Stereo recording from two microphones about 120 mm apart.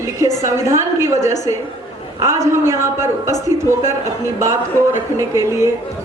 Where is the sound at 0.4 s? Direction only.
25° right (ahead or behind).